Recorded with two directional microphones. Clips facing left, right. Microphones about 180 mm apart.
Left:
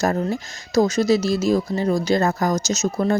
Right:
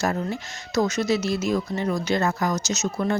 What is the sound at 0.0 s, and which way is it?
Speech, 40° left (ahead or behind).